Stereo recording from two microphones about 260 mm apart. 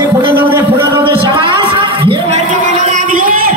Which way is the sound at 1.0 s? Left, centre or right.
Centre.